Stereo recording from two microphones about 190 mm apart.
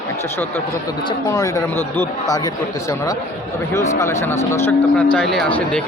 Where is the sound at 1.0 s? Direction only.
20° left (ahead or behind).